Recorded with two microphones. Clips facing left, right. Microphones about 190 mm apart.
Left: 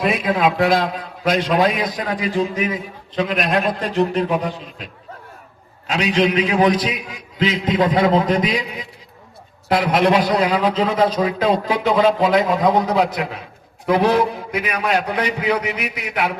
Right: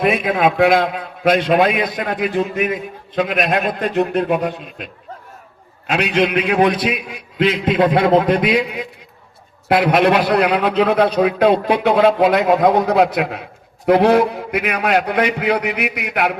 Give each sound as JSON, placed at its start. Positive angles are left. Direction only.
{"t": 0.0, "sound": "a man's voice", "side_deg": -55}
{"t": 5.9, "sound": "a man's voice", "side_deg": -60}